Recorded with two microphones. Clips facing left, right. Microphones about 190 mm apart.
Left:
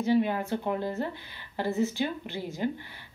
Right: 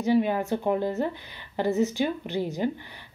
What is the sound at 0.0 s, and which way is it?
A woman's voice, 15° right (ahead or behind).